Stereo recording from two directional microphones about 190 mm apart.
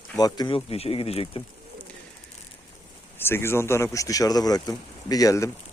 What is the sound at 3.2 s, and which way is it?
Speech, 10° left (ahead or behind).